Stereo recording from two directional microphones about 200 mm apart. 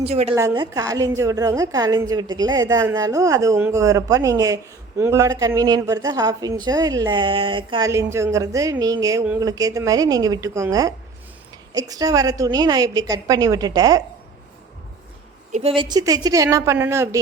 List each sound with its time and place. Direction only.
0.0 s a woman's voice: 30° right (ahead or behind)
0.3 s a woman's voice: 20° right (ahead or behind)
15.5 s a woman's voice: 25° right (ahead or behind)